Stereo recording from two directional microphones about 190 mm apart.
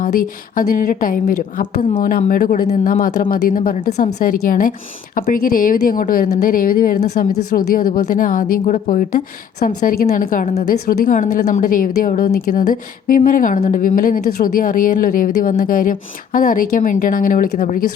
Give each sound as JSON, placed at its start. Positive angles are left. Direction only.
{"t": 0.0, "sound": "a woman's voice", "side_deg": 45}